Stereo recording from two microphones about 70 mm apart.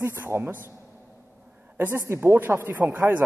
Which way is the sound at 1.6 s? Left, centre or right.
Right.